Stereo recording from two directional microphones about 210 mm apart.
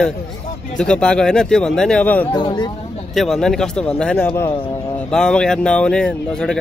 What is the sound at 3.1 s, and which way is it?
Speech, centre (ahead or behind).